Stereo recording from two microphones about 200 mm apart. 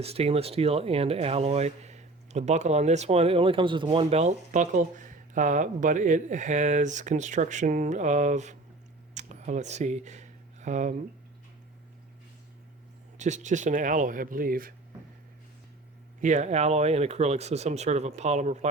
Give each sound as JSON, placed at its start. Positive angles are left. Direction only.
{"t": 0.0, "sound": "speech", "side_deg": -30}
{"t": 9.1, "sound": "a sound", "side_deg": -35}
{"t": 13.1, "sound": "speech", "side_deg": -35}
{"t": 16.2, "sound": "speech", "side_deg": -35}